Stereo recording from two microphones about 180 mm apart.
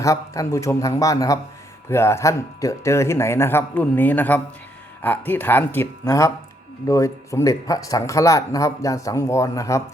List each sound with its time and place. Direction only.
0.0 s a man's voice: 20° left (ahead or behind)